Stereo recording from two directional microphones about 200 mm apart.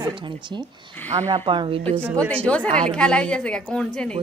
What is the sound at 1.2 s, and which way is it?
A woman's voice, 25° right (ahead or behind).